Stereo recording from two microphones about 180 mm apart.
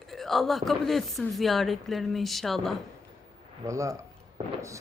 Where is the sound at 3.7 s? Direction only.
15° right (ahead or behind).